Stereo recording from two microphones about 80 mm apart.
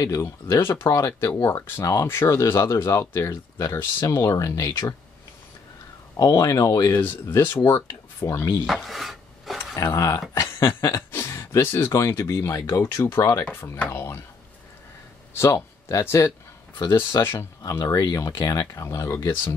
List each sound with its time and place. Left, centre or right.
0.0 s speech: left
0.6 s speech: left
0.8 s speech: left
2.0 s speech: left
6.1 s speech: left
7.0 s speech: left
8.3 s speech: left
8.6 s filing: centre
9.8 s speech: left
13.7 s speech: left
15.9 s speech: left
17.6 s speech: left